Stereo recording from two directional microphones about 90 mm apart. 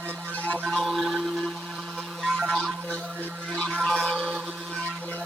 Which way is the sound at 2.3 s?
10° right (ahead or behind).